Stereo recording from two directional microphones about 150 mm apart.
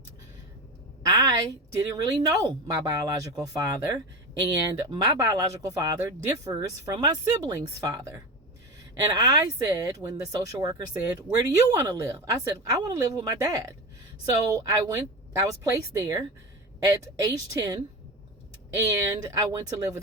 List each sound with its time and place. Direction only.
1.0 s a woman's voice: 25° right (ahead or behind)
18.9 s a woman's voice: 25° right (ahead or behind)